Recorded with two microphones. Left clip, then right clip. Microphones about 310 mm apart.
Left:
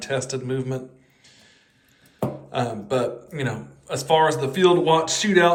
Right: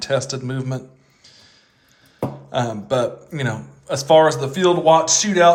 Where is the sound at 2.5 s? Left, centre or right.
Centre.